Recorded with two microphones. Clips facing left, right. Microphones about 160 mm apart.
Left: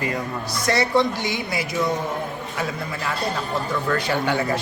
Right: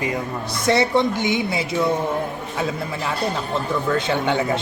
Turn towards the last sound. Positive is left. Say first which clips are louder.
# right 2 dB
turn(degrees=-20)  # may be behind; listen again after turning